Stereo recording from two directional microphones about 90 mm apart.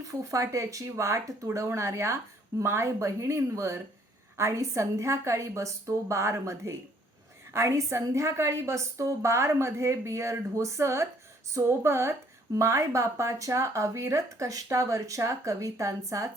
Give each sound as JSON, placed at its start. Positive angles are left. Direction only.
{"t": 0.0, "sound": "speech", "side_deg": -40}